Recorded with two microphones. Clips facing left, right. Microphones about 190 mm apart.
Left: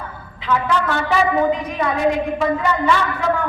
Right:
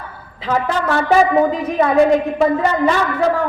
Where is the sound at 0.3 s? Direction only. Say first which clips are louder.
Right 1 dB; 40° right (ahead or behind).